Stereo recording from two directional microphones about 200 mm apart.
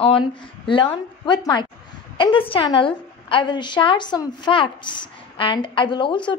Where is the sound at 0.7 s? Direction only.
25° left (ahead or behind).